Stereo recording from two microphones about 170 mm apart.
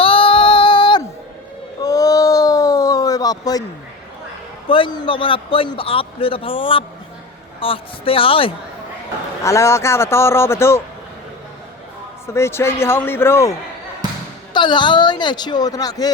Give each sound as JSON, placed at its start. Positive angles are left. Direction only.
{"t": 0.0, "sound": "female singing", "side_deg": 30}
{"t": 1.8, "sound": "a sound", "side_deg": 20}
{"t": 4.7, "sound": "a man's voice", "side_deg": 25}
{"t": 9.4, "sound": "a man's voice", "side_deg": 15}
{"t": 12.3, "sound": "a man's voice", "side_deg": 15}
{"t": 14.5, "sound": "a man's voice", "side_deg": 25}